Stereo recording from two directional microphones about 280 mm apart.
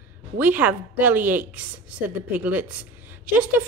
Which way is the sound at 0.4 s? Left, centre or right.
Centre.